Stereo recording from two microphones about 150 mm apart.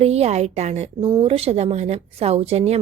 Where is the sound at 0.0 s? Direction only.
45° right (ahead or behind).